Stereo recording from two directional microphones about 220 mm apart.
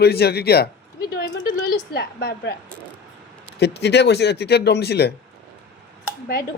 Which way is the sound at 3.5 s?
50° left (ahead or behind).